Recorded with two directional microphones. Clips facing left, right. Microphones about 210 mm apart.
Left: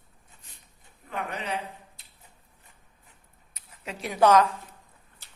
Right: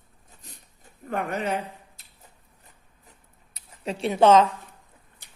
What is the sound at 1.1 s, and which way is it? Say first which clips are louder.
Speech: right 6 dB; 45° right (ahead or behind).